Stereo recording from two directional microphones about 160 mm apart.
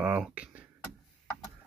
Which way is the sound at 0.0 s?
5° right (ahead or behind).